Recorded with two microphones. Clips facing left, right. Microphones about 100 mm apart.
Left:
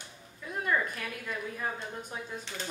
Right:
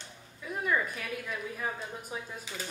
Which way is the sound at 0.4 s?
5° right (ahead or behind).